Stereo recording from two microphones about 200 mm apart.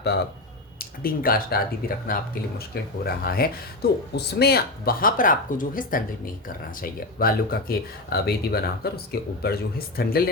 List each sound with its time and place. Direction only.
0.8 s speech: 45° left (ahead or behind)